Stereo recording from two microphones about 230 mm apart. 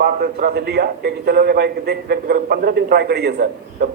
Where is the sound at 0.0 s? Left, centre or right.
Right.